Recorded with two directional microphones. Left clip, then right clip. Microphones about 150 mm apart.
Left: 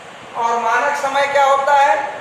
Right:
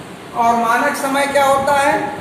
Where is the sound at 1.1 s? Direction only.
10° left (ahead or behind).